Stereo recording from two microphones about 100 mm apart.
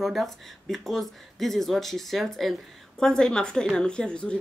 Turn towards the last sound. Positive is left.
turn(degrees=10)  # may be behind; listen again after turning